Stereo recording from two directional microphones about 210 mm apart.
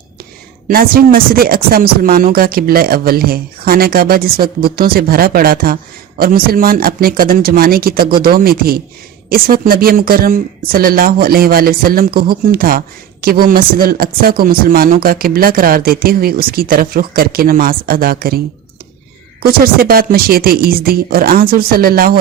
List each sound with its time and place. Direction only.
0.7 s speech: 45° right (ahead or behind)
19.4 s speech: 45° right (ahead or behind)